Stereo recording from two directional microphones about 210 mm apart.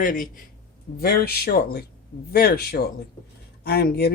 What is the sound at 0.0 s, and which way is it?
Speech, 40° left (ahead or behind).